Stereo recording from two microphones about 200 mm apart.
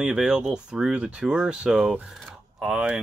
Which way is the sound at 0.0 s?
5° right (ahead or behind).